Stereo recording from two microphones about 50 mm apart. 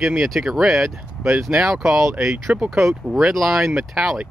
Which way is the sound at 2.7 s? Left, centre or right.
Centre.